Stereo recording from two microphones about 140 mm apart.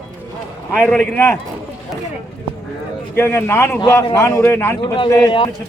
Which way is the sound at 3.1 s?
15° left (ahead or behind).